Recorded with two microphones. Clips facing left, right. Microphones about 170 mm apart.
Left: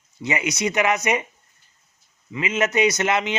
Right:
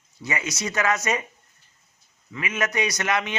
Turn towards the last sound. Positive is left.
turn(degrees=25)  # may be behind; listen again after turning